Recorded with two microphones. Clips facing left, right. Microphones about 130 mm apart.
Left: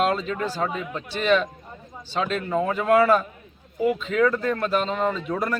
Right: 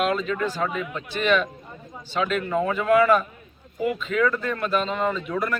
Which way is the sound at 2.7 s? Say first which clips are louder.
Even; 30° left (ahead or behind).